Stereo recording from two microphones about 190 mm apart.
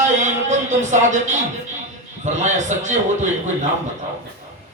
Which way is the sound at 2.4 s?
40° right (ahead or behind).